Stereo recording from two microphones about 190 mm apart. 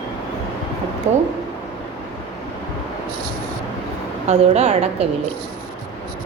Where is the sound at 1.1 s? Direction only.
35° right (ahead or behind).